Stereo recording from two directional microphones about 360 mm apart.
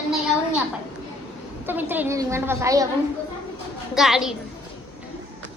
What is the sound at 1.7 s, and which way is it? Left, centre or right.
A woman's voice, centre.